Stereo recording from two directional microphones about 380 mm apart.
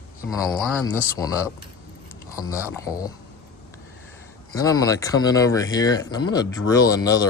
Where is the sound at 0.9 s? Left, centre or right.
Centre.